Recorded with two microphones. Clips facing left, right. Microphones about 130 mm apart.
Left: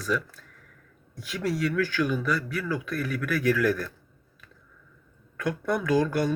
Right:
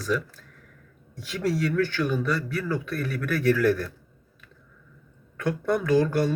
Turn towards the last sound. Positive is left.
turn(degrees=-30)  # may be behind; listen again after turning